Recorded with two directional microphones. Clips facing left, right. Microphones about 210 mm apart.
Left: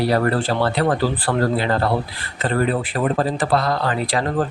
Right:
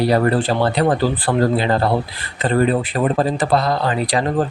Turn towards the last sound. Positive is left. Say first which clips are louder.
# right 2 dB
turn(degrees=-20)  # may be behind; listen again after turning